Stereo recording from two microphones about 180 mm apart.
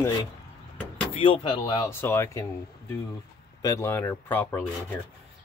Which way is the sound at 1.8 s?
15° left (ahead or behind).